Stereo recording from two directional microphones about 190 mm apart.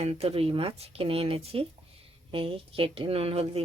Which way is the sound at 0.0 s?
35° right (ahead or behind).